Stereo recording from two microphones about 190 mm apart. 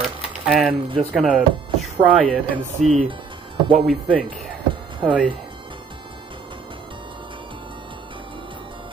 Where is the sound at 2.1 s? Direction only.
5° right (ahead or behind).